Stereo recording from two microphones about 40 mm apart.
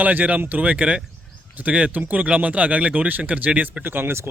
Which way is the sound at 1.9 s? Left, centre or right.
Right.